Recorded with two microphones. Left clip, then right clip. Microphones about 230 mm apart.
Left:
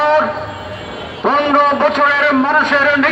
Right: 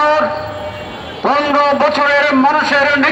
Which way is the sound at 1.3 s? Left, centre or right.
Right.